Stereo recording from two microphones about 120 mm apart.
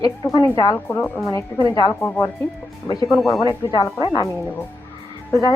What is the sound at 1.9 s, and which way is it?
Speech, 15° left (ahead or behind).